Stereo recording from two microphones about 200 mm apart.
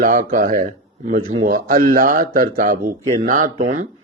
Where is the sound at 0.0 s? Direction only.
45° right (ahead or behind).